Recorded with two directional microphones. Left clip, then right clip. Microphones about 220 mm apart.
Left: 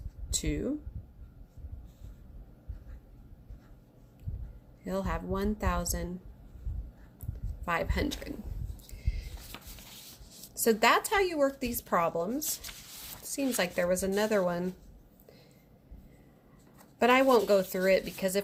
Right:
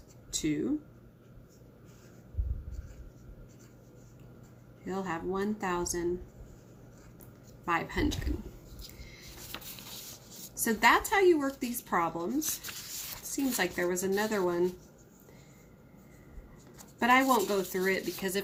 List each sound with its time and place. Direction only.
0.3 s speech: 45° left (ahead or behind)
4.9 s a woman's voice: 45° left (ahead or behind)
7.6 s a woman's voice: 45° left (ahead or behind)
9.5 s a sound: 15° left (ahead or behind)
10.5 s a woman's voice: 40° left (ahead or behind)
17.0 s a woman's voice: 45° left (ahead or behind)